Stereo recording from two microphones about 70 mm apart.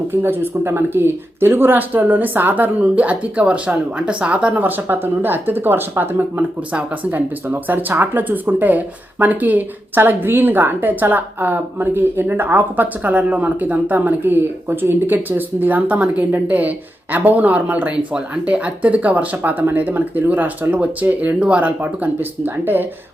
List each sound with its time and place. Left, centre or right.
0.1 s speech: right